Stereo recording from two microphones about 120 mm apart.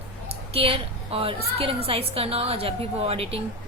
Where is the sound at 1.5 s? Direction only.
50° right (ahead or behind).